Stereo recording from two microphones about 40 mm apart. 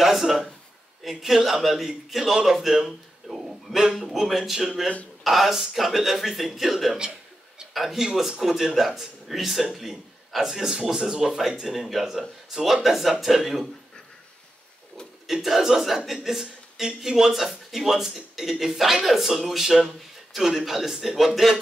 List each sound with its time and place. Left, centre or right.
0.0 s a man's voice: centre
4.4 s speech: centre
5.2 s speech: centre
7.0 s a sound: right
7.7 s speech: centre
15.4 s speech: centre